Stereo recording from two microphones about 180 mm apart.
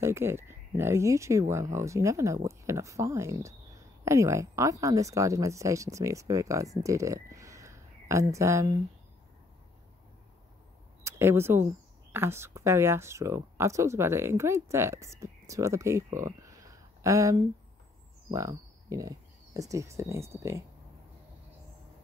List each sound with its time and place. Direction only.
0.0 s speech: 15° right (ahead or behind)
11.1 s speech: 15° right (ahead or behind)